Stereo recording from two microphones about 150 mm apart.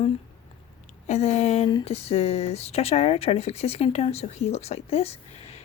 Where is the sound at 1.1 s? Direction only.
50° left (ahead or behind).